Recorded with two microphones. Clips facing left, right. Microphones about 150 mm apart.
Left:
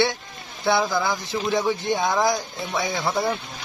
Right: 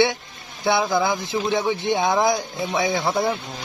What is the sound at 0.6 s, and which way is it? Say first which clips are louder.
Speech: right 2 dB; 15° right (ahead or behind).